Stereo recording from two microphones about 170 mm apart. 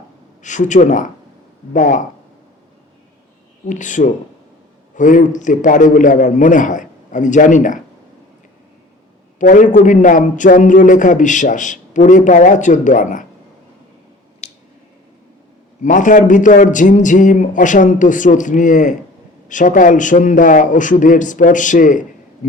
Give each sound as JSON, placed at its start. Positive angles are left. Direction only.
{"t": 0.4, "sound": "a man's voice", "side_deg": 45}
{"t": 3.7, "sound": "a man's voice", "side_deg": 45}
{"t": 9.4, "sound": "a man's voice", "side_deg": 50}
{"t": 14.4, "sound": "squish", "side_deg": 40}
{"t": 15.8, "sound": "a man's voice", "side_deg": 50}